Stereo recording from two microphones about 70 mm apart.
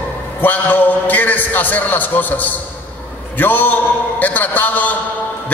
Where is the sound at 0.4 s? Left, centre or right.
Left.